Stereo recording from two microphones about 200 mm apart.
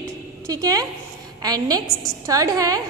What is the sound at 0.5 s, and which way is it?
A woman's voice, 20° right (ahead or behind).